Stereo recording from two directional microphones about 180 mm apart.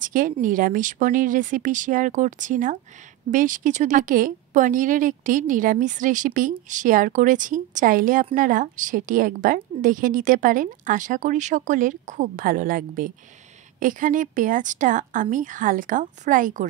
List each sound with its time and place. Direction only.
0.0 s speech: 45° right (ahead or behind)